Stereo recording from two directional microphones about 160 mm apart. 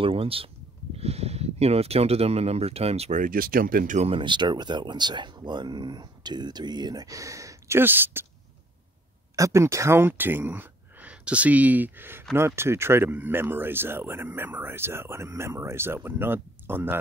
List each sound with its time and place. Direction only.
0.0 s speech: 35° right (ahead or behind); by 4.1 s 55° right (ahead or behind)
4.1 s speech: 30° right (ahead or behind); by 8.3 s 15° right (ahead or behind)
9.3 s speech: 20° right (ahead or behind)